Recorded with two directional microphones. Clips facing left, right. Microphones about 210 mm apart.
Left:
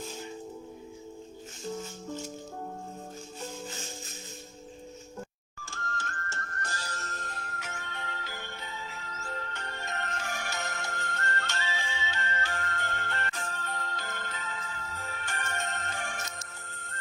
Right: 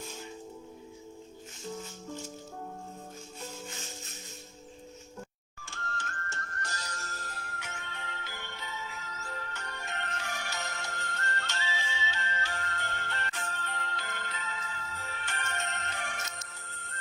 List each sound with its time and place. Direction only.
5.6 s music: 45° left (ahead or behind)